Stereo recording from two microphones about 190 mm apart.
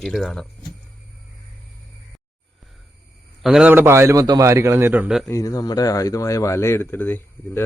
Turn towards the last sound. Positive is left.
turn(degrees=10)  # may be behind; listen again after turning